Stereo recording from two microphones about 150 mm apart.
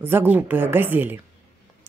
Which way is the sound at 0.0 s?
15° right (ahead or behind).